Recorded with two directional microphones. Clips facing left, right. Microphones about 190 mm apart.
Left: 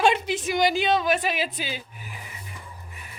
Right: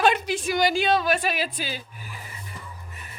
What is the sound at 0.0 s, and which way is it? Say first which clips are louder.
A woman's voice: even; 25° left (ahead or behind).